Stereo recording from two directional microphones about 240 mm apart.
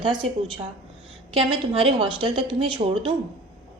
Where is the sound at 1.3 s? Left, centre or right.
Right.